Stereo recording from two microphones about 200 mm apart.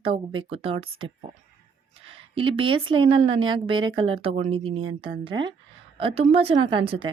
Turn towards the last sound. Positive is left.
turn(degrees=-25)  # may be behind; listen again after turning